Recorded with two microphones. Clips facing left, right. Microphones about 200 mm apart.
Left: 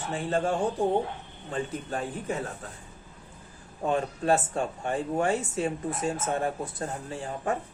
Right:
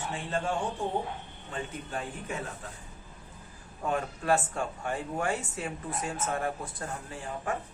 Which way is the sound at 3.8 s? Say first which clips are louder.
Left 3 dB; 25° left (ahead or behind).